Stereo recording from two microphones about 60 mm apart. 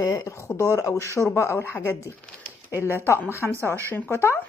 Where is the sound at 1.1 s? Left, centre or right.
Left.